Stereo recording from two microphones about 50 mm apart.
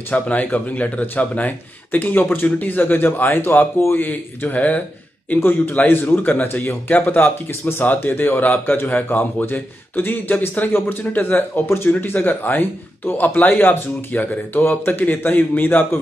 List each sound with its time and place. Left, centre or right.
0.1 s speech: left